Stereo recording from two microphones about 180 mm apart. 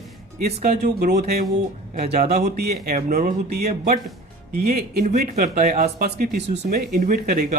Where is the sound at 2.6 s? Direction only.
55° right (ahead or behind).